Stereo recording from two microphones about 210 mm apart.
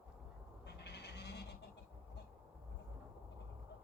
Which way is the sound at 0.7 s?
55° left (ahead or behind).